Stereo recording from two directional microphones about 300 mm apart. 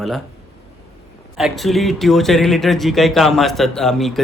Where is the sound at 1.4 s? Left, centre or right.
Centre.